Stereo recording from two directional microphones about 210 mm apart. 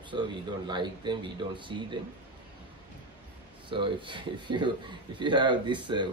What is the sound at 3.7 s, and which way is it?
Speech, 25° right (ahead or behind).